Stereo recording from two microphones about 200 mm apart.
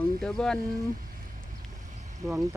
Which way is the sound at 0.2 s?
5° left (ahead or behind).